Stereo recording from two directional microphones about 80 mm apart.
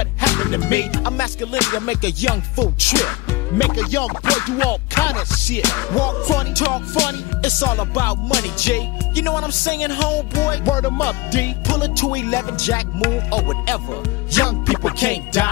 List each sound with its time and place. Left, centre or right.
0.2 s music: left